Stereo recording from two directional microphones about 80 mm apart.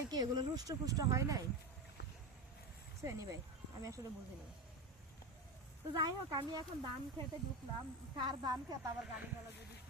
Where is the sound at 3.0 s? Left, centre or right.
Right.